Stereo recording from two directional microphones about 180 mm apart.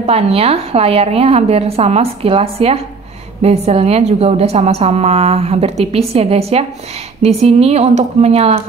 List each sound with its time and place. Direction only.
0.0 s a woman's voice: 35° right (ahead or behind)